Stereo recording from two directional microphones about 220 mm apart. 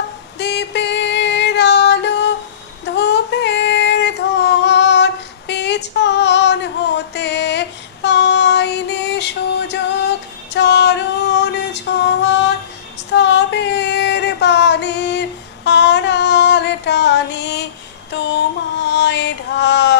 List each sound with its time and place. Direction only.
0.4 s music: 50° left (ahead or behind)
2.8 s female singing: 50° left (ahead or behind)
18.1 s music: 50° left (ahead or behind)